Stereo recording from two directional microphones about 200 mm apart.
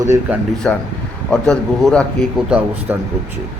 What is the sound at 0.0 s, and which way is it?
Speech, 15° right (ahead or behind).